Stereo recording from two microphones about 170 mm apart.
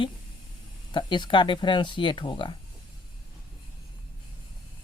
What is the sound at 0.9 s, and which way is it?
Speech, 25° left (ahead or behind).